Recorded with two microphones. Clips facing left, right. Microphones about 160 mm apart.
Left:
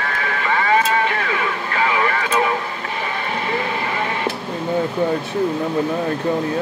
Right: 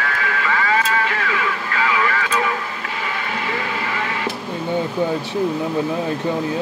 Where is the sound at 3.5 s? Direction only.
30° left (ahead or behind).